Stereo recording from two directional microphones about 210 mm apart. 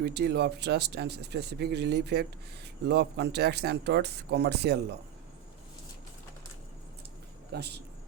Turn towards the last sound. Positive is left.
turn(degrees=-50)  # may be behind; listen again after turning